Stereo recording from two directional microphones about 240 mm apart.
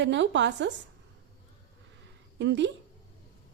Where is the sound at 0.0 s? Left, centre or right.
Right.